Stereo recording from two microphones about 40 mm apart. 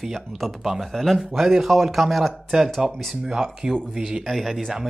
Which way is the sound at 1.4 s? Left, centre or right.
Centre.